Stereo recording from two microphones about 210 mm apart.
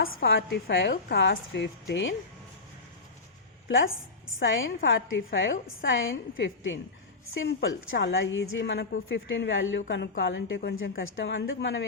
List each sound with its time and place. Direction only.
0.3 s a woman's voice: 60° left (ahead or behind)
1.0 s a woman's voice: 50° left (ahead or behind)
4.4 s a woman's voice: 65° left (ahead or behind)